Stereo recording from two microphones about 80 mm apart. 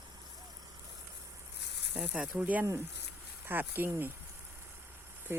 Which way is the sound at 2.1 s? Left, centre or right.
Centre.